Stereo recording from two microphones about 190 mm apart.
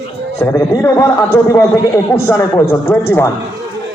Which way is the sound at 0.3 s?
15° left (ahead or behind).